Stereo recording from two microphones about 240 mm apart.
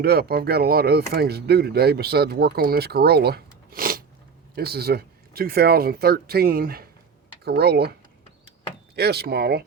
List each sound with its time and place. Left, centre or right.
0.0 s speech: right
9.0 s speech: right